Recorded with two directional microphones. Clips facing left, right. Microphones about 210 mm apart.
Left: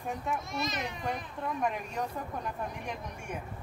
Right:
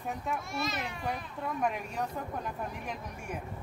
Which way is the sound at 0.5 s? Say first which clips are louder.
Even; 20° left (ahead or behind).